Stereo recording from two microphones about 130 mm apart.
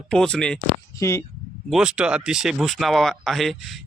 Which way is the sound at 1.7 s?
5° right (ahead or behind).